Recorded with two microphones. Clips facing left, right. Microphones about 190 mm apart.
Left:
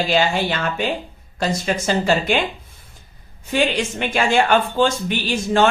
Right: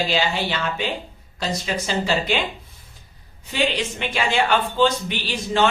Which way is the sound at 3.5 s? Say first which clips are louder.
Left 3 dB; 45° left (ahead or behind).